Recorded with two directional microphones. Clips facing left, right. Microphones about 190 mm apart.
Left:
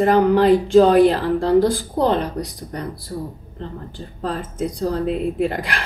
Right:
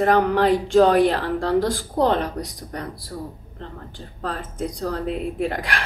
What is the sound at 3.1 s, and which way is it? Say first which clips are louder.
Speech: left 4 dB; 20° left (ahead or behind).